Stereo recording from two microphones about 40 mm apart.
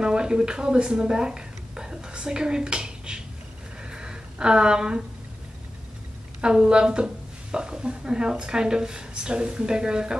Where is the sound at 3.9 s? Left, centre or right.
Centre.